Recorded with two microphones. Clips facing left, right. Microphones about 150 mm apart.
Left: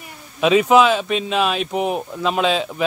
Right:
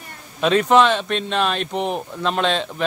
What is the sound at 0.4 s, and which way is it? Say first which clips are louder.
Speech: left 2 dB; 5° left (ahead or behind).